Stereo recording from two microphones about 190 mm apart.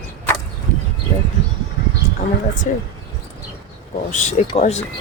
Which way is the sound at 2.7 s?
40° left (ahead or behind).